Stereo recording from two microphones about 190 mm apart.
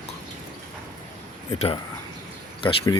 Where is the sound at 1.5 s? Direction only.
35° left (ahead or behind).